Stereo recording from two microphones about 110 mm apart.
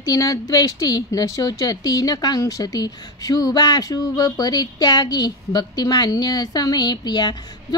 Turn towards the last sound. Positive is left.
turn(degrees=40)  # may be behind; listen again after turning